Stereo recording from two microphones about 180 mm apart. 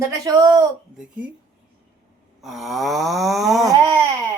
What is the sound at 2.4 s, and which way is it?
A woman's voice, centre (ahead or behind).